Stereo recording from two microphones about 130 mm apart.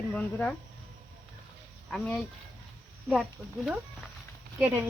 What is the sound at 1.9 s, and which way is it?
Speech, 5° left (ahead or behind).